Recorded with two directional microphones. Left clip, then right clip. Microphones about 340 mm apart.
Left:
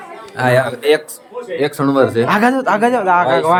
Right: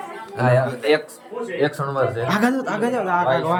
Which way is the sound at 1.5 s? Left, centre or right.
Left.